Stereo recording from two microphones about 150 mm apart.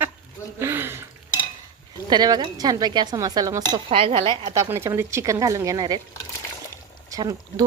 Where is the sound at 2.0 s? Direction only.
30° right (ahead or behind).